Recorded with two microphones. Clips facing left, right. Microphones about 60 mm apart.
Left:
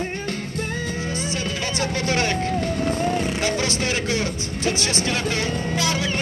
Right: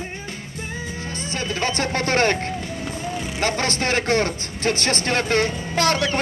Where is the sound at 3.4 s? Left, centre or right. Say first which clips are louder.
Right 1 dB; right.